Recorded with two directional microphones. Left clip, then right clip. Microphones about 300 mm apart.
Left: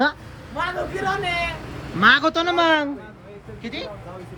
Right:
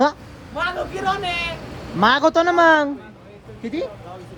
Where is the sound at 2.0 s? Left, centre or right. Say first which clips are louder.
Even; centre.